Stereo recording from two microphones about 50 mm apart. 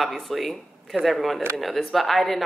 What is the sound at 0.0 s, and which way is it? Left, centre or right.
Speech, centre.